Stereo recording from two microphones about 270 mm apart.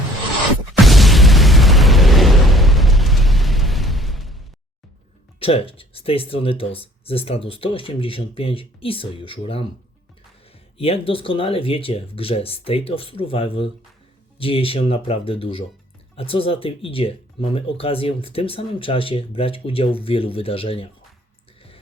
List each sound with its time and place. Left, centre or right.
0.7 s explosion: centre
5.4 s speech: left
10.8 s speech: left